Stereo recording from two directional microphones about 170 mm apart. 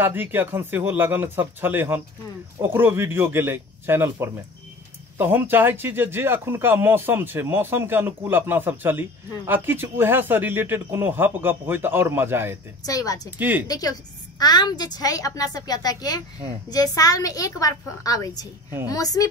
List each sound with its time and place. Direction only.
0.0 s speech: 10° right (ahead or behind)
12.8 s a woman's voice: 20° left (ahead or behind)
13.4 s speech: 10° right (ahead or behind)
13.7 s a woman's voice: 20° left (ahead or behind)